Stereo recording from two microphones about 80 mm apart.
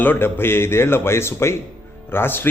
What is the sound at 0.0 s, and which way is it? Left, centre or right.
A man's voice, left.